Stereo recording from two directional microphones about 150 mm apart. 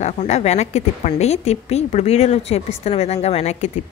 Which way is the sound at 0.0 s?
50° left (ahead or behind).